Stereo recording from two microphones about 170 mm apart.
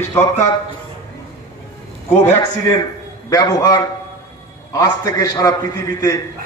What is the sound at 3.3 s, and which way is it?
A man's voice, 20° left (ahead or behind).